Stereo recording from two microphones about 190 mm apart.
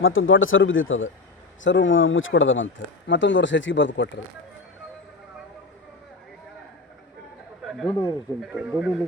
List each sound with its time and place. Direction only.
0.0 s speech: 90° left
1.6 s speech: 80° left
7.6 s a sound: centre (ahead or behind)
8.4 s speech: 5° right (ahead or behind)